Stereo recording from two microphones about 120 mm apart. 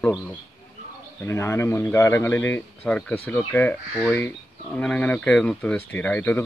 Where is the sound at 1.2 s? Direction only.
20° left (ahead or behind).